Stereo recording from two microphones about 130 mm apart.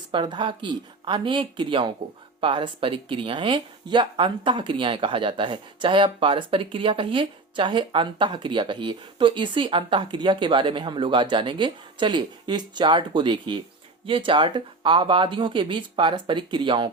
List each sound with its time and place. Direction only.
0.1 s speech: 40° right (ahead or behind)